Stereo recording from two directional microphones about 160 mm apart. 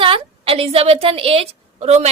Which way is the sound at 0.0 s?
35° right (ahead or behind).